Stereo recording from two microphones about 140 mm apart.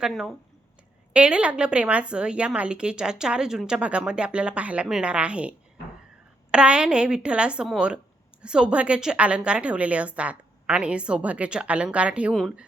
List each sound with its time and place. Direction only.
0.0 s a woman's voice: centre (ahead or behind)